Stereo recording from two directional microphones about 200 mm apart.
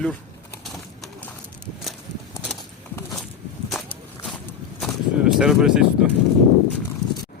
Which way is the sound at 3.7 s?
Centre (ahead or behind).